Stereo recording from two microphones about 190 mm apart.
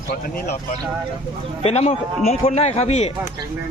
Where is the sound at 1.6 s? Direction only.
35° left (ahead or behind).